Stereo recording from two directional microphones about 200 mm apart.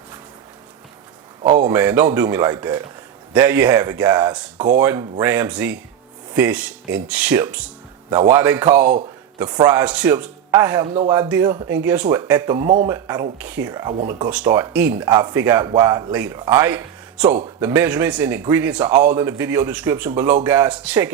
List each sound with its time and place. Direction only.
1.5 s speech: 10° right (ahead or behind)
8.8 s a man's voice: 35° right (ahead or behind)
9.6 s speech: 10° right (ahead or behind)
13.4 s speech: 5° right (ahead or behind)
13.7 s speech: 20° right (ahead or behind)